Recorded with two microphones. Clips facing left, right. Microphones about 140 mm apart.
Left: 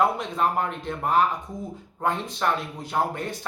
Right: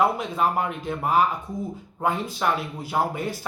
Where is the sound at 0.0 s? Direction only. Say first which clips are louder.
Right 1 dB; 5° right (ahead or behind).